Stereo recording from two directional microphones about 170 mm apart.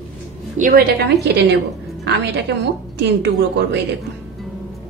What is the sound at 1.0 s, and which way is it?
Speech, 80° right.